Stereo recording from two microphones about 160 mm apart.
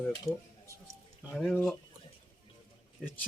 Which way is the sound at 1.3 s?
Centre (ahead or behind).